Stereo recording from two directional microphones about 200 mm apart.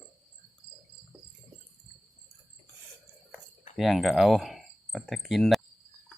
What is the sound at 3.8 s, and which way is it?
Speech, centre (ahead or behind).